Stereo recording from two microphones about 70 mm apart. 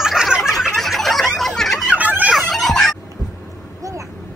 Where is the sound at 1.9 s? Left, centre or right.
Right.